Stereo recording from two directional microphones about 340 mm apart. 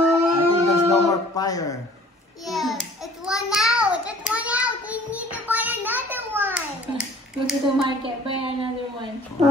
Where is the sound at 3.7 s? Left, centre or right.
Centre.